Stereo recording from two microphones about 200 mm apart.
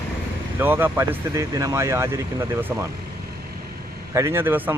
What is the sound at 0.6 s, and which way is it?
Speech, 10° right (ahead or behind).